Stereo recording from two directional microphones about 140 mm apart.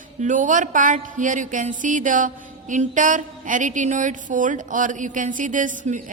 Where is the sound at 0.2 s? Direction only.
65° right (ahead or behind).